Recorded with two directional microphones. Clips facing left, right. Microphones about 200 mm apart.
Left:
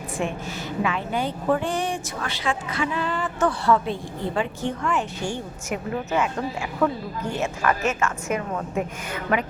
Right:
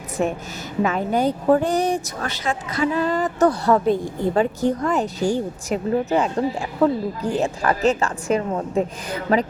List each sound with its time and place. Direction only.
0.2 s speech: 40° right (ahead or behind)